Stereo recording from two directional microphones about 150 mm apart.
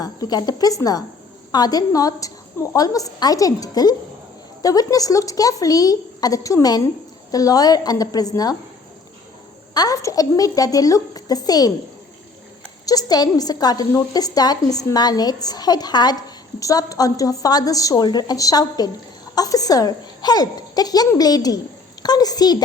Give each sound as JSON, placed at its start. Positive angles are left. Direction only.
{"t": 0.0, "sound": "speech", "side_deg": 25}
{"t": 9.7, "sound": "speech", "side_deg": 25}
{"t": 12.8, "sound": "speech", "side_deg": 25}